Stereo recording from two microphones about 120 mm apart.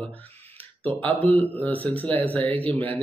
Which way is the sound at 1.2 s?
15° left (ahead or behind).